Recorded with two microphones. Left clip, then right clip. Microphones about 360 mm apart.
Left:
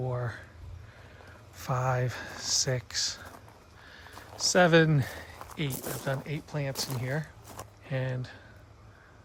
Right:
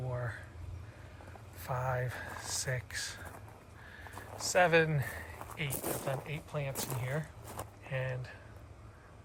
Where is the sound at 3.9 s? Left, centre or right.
Centre.